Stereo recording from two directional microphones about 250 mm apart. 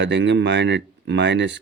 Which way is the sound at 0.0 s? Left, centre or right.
Right.